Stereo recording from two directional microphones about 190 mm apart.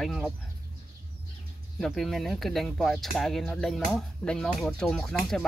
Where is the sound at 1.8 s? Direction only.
Centre (ahead or behind).